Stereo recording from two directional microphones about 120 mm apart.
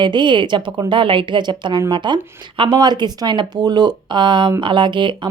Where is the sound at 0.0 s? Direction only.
40° right (ahead or behind).